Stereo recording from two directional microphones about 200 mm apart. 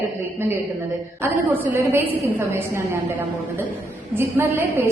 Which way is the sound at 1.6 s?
15° right (ahead or behind).